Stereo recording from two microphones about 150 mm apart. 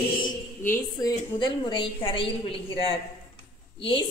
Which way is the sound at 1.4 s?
30° left (ahead or behind).